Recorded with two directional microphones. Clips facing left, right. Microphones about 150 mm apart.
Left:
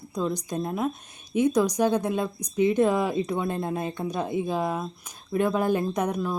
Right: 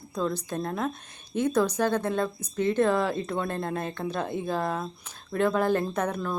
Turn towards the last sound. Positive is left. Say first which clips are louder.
# left 2 dB
turn(degrees=10)  # may be behind; listen again after turning